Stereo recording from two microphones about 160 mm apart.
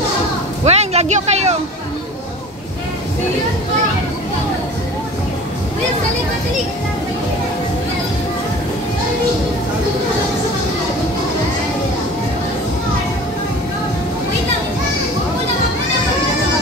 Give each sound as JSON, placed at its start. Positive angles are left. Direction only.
{"t": 0.7, "sound": "speech", "side_deg": -40}